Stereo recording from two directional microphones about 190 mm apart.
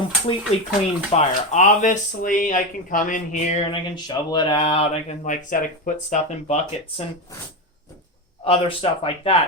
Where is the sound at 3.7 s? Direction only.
25° left (ahead or behind).